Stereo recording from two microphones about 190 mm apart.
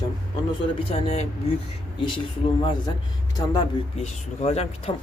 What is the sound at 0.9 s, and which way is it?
Speech, 35° left (ahead or behind).